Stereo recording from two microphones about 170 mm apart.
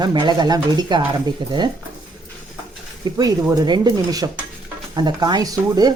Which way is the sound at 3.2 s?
25° right (ahead or behind).